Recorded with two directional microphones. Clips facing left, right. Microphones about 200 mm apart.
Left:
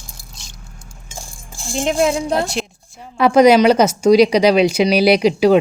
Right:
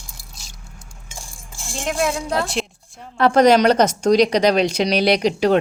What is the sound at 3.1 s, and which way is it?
A woman's voice, 10° left (ahead or behind).